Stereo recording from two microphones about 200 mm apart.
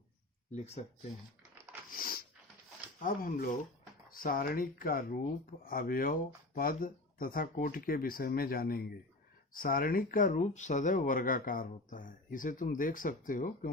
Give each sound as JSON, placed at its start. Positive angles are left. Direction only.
{"t": 0.5, "sound": "speech", "side_deg": 35}
{"t": 2.0, "sound": "dog", "side_deg": 45}
{"t": 3.0, "sound": "speech", "side_deg": 45}